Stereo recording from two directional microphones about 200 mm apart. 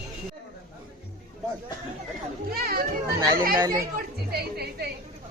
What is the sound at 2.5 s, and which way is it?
Speech, 50° right (ahead or behind).